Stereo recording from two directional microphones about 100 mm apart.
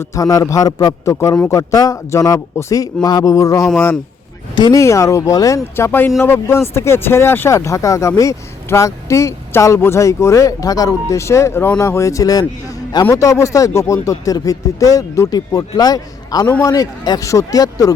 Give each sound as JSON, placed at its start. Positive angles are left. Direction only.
{"t": 0.0, "sound": "speech", "side_deg": 30}
{"t": 4.7, "sound": "speech", "side_deg": 30}
{"t": 5.7, "sound": "speech", "side_deg": 25}